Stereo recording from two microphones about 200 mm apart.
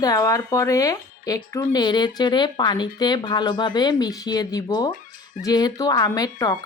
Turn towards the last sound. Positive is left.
turn(degrees=20)  # may be behind; listen again after turning